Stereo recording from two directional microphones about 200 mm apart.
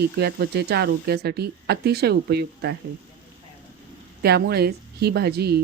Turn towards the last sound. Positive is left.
turn(degrees=-50)  # may be behind; listen again after turning